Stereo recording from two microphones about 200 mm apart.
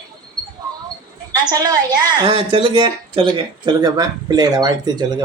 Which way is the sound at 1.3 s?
20° right (ahead or behind).